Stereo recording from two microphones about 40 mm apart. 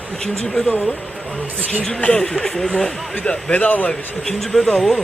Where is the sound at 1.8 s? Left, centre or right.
Left.